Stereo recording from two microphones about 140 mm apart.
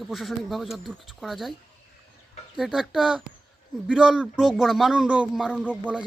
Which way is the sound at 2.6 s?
5° right (ahead or behind).